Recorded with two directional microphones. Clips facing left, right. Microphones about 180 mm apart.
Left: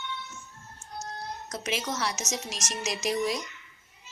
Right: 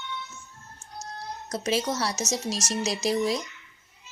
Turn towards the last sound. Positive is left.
turn(degrees=-30)  # may be behind; listen again after turning